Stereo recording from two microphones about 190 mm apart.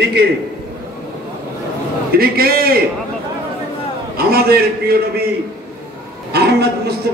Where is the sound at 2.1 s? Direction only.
55° right (ahead or behind).